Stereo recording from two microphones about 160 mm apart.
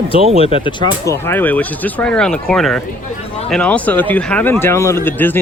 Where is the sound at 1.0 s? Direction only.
15° left (ahead or behind).